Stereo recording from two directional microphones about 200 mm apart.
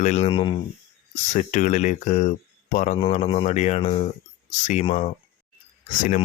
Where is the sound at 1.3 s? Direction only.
40° left (ahead or behind).